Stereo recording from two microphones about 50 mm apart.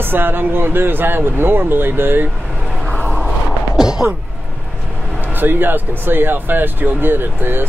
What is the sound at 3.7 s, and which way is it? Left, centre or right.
Whack, centre.